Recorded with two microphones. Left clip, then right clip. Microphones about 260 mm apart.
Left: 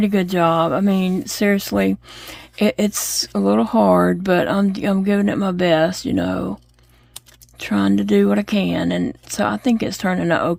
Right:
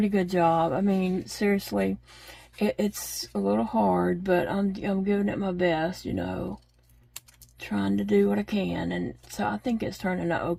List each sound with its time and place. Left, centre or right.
0.0 s speech: left
7.6 s speech: left